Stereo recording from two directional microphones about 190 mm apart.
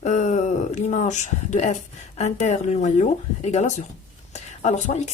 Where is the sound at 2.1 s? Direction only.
40° left (ahead or behind).